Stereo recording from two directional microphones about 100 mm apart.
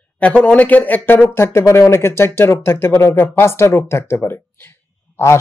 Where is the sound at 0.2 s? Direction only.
10° left (ahead or behind).